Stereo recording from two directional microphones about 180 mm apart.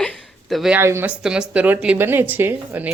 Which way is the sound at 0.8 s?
15° right (ahead or behind).